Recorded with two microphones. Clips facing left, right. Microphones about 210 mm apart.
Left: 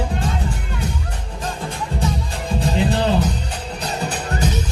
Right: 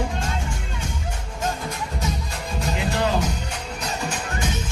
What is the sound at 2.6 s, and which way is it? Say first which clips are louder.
Music: left 5 dB; 35° left (ahead or behind).